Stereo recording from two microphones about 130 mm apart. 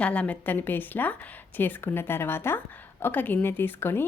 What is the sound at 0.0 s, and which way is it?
A woman's voice, 10° left (ahead or behind).